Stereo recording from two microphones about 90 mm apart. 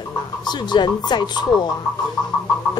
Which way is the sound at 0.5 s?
55° left (ahead or behind).